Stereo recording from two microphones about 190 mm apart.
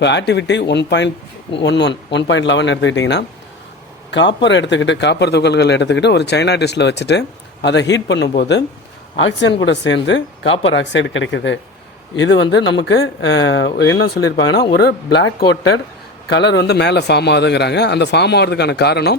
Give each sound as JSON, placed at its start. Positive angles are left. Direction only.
{"t": 0.0, "sound": "speech", "side_deg": 65}